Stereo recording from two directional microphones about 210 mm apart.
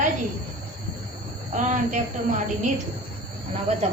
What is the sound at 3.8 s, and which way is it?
Speech, 30° right (ahead or behind).